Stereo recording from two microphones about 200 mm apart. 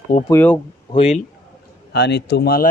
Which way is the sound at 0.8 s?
30° left (ahead or behind).